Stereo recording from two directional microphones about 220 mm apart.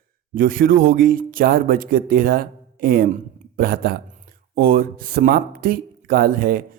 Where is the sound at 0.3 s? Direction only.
40° right (ahead or behind).